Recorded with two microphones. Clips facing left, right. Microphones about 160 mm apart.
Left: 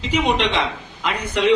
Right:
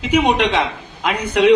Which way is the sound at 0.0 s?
50° right (ahead or behind).